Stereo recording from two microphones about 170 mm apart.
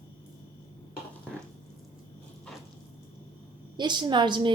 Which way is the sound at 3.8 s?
25° right (ahead or behind).